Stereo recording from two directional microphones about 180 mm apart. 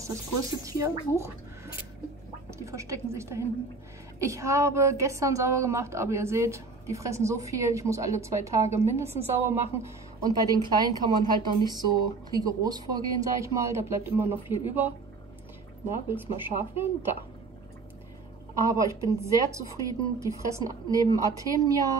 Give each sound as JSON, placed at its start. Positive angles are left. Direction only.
{"t": 0.0, "sound": "a woman's voice", "side_deg": -15}
{"t": 2.6, "sound": "a woman's voice", "side_deg": -15}
{"t": 16.2, "sound": "a woman's voice", "side_deg": -10}
{"t": 18.6, "sound": "a woman's voice", "side_deg": -15}